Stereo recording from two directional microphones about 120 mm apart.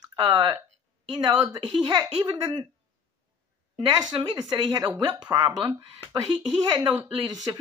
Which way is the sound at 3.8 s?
35° right (ahead or behind).